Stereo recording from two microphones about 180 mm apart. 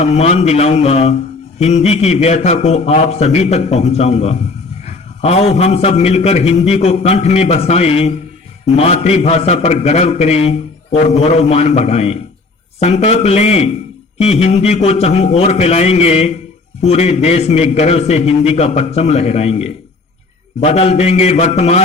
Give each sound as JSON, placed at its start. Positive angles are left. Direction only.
{"t": 0.0, "sound": "a man's voice", "side_deg": 35}